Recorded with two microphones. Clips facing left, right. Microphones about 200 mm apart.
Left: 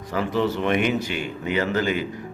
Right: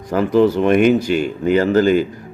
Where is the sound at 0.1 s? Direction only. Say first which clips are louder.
Right 9 dB; 45° right (ahead or behind).